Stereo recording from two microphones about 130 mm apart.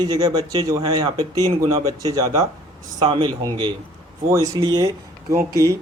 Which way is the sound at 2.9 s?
40° right (ahead or behind).